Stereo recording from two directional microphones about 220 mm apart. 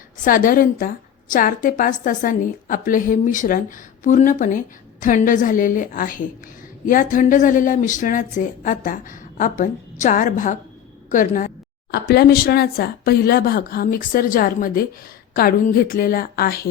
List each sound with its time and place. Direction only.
0.3 s a woman's voice: 40° left (ahead or behind)